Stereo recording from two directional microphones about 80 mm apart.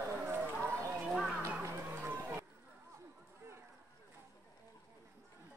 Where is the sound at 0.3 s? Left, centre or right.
Right.